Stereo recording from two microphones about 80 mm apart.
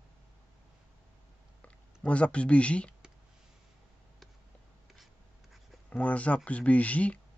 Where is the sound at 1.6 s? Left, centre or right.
Centre.